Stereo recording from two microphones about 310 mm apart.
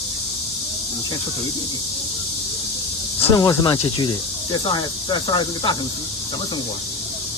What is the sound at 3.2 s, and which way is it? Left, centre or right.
Speech, centre.